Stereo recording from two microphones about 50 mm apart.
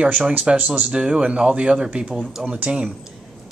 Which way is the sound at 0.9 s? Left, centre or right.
Centre.